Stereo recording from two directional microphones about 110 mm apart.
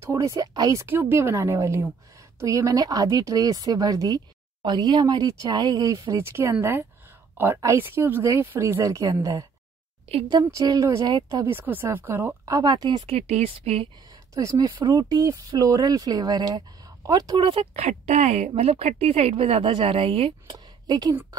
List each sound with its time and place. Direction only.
0.0 s speech: 30° right (ahead or behind)
0.8 s speech: 20° right (ahead or behind)
10.5 s speech: 30° right (ahead or behind)
11.4 s speech: 20° right (ahead or behind)
12.4 s speech: 35° right (ahead or behind)
13.0 s speech: 65° right (ahead or behind)
14.3 s speech: 30° right (ahead or behind)
17.4 s speech: 50° right (ahead or behind)
17.7 s a woman's voice: 85° right; by 20.3 s 55° right (ahead or behind)
20.4 s a sound: 35° right (ahead or behind)